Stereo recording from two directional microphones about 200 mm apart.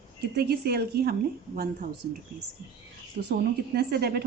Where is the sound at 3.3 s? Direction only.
55° right (ahead or behind).